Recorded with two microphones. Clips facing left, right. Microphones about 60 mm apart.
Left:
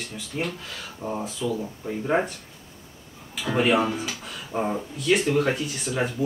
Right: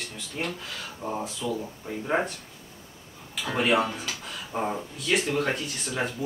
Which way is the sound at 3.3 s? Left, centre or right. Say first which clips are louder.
Left 2 dB; centre.